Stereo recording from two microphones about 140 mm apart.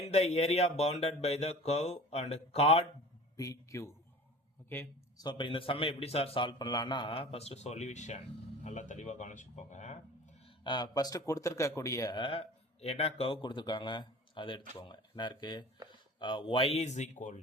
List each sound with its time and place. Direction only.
0.0 s speech: 50° left (ahead or behind)
3.3 s speech: 25° left (ahead or behind)
5.1 s a man's voice: 30° left (ahead or behind); by 10.0 s 55° left (ahead or behind)
10.6 s speech: 35° left (ahead or behind)
12.1 s a man's voice: 40° left (ahead or behind); by 17.4 s 60° left (ahead or behind)